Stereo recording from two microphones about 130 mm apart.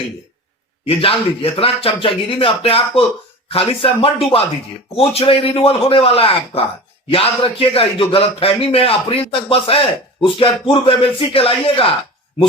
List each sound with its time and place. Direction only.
0.9 s speech: 45° left (ahead or behind)